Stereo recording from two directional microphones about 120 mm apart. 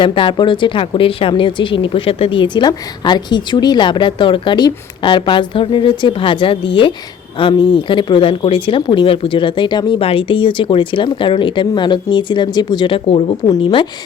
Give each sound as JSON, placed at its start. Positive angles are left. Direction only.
{"t": 0.0, "sound": "speech", "side_deg": 45}